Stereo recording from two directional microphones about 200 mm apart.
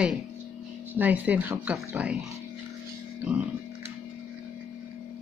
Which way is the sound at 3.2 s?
5° right (ahead or behind).